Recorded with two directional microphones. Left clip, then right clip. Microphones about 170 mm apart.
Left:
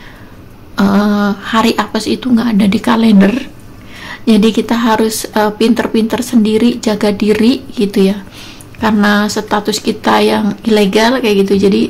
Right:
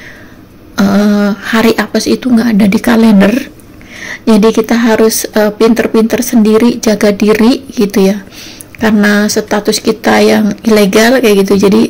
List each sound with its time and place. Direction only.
0.7 s a woman's voice: 15° right (ahead or behind)